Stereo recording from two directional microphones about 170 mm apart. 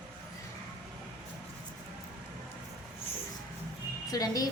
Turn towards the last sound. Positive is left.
turn(degrees=20)  # may be behind; listen again after turning